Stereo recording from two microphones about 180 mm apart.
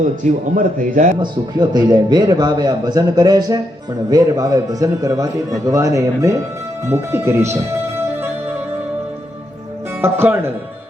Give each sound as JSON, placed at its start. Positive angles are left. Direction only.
{"t": 0.0, "sound": "a man's voice", "side_deg": -45}
{"t": 1.2, "sound": "a man's voice", "side_deg": -25}
{"t": 6.8, "sound": "music", "side_deg": -15}
{"t": 10.0, "sound": "speech", "side_deg": -10}